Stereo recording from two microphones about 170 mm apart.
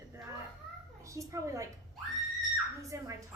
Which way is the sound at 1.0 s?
20° right (ahead or behind).